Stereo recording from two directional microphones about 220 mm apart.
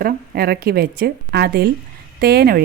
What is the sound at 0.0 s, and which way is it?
A woman's voice, 45° right (ahead or behind).